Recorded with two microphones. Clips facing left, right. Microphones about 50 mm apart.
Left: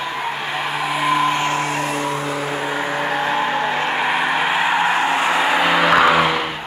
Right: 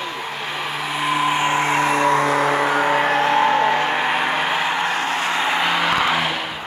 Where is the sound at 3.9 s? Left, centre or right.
Centre.